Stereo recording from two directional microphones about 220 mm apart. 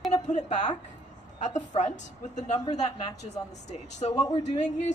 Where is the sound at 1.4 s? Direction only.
35° left (ahead or behind).